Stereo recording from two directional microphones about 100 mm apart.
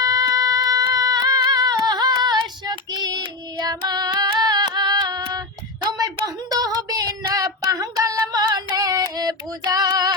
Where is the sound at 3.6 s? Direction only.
40° right (ahead or behind).